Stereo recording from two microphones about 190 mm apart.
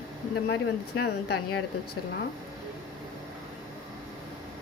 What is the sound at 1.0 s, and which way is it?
Speech, 60° left (ahead or behind).